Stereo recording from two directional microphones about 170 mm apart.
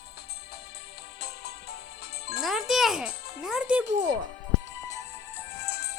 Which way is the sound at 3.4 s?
5° right (ahead or behind).